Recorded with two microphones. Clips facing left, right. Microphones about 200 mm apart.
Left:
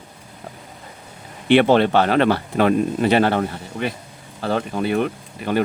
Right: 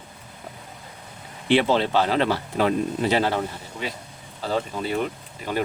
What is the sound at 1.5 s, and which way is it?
Speech, 60° left (ahead or behind).